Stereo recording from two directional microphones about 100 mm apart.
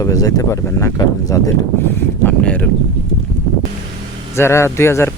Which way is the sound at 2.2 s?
15° left (ahead or behind).